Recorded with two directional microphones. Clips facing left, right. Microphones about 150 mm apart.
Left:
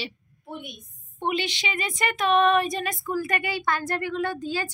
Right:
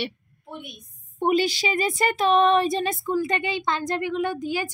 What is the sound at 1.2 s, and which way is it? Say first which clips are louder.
A child's voice: right 6 dB; 40° right (ahead or behind).